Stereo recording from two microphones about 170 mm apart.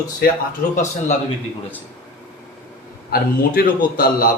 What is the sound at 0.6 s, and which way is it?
Speech, 50° left (ahead or behind).